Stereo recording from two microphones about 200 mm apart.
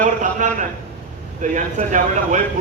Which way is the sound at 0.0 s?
35° right (ahead or behind).